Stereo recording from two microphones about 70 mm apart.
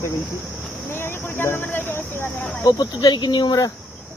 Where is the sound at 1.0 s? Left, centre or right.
Left.